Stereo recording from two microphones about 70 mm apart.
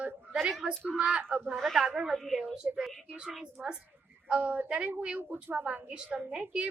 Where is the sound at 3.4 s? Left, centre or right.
Centre.